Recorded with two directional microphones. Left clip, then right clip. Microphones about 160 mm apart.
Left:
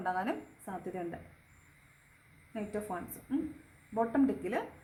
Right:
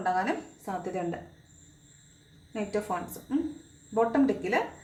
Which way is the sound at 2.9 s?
25° left (ahead or behind).